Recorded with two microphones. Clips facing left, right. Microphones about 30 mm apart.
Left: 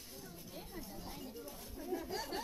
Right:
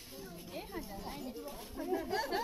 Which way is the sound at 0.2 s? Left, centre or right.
Right.